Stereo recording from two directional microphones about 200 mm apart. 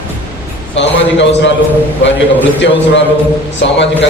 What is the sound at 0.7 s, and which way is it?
Speech, 65° left (ahead or behind).